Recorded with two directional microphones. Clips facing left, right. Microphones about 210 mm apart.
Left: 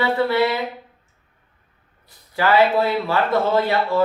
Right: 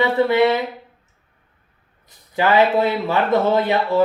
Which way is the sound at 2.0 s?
20° right (ahead or behind).